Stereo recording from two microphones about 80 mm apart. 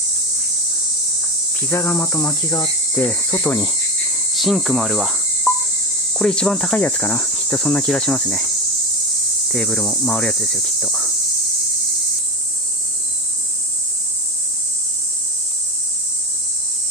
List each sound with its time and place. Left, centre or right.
1.6 s cricket: left
3.0 s speech: left
4.4 s cricket: centre
6.8 s cricket: left
7.5 s cricket: centre
9.5 s cricket: centre